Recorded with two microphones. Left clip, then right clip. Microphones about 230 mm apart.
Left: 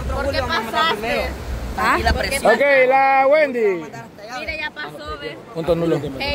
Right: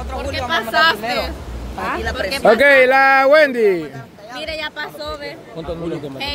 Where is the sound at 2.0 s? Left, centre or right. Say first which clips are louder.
Left 1 dB; left.